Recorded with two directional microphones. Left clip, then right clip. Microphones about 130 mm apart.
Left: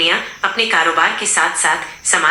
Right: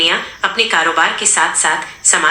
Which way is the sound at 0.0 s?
30° right (ahead or behind).